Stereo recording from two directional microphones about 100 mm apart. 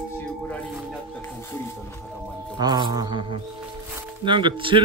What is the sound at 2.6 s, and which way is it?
Mantra, 45° right (ahead or behind).